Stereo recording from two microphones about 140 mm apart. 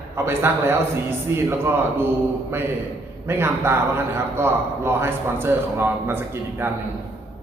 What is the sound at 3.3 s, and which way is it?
A man's voice, 15° right (ahead or behind).